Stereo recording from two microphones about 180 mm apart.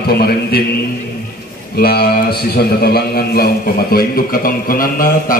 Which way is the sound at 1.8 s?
60° left (ahead or behind).